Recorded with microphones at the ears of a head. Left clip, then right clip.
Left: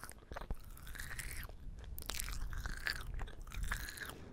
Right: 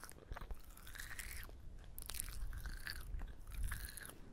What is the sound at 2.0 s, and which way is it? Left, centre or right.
Biting, left.